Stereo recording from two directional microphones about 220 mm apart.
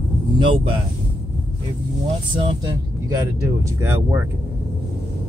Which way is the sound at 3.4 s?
10° right (ahead or behind).